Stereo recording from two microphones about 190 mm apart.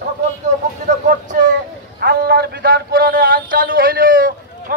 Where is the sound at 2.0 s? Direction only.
55° right (ahead or behind).